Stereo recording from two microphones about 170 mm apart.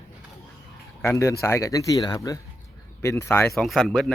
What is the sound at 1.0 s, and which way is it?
A man's voice, 15° left (ahead or behind).